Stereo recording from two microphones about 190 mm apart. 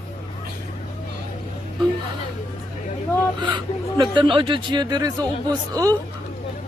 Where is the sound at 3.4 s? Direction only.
25° right (ahead or behind).